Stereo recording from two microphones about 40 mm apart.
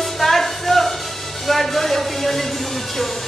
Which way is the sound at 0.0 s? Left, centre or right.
Centre.